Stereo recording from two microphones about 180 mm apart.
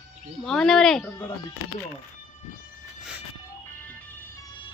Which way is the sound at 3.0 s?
5° right (ahead or behind).